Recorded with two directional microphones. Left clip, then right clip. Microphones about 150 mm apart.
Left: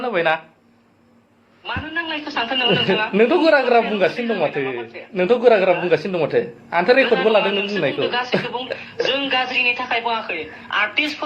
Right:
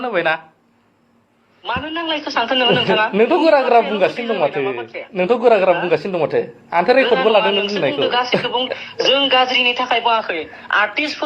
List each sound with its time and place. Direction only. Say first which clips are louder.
0.0 s a man's voice: right 1 dB; 30° right (ahead or behind)
1.6 s a man's voice: right 3 dB; 35° right (ahead or behind)